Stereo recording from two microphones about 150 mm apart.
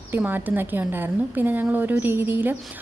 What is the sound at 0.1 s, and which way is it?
Speech, 10° right (ahead or behind).